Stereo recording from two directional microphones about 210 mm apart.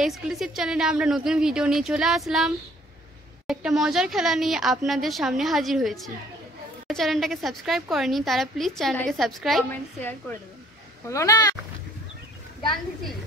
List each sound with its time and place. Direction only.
0.0 s a woman's voice: centre (ahead or behind)
11.1 s speech: 15° left (ahead or behind)